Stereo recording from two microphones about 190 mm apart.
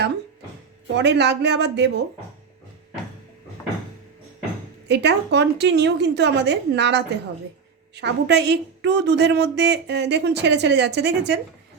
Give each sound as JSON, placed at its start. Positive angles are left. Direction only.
{"t": 0.9, "sound": "a woman's voice", "side_deg": -65}
{"t": 4.9, "sound": "a woman's voice", "side_deg": -60}